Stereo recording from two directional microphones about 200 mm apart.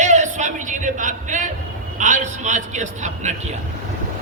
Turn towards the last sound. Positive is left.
turn(degrees=-35)  # may be behind; listen again after turning